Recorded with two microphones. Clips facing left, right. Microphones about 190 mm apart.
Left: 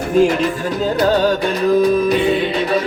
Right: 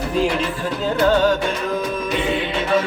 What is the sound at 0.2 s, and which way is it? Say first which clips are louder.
Music: left 7 dB; 45° left (ahead or behind).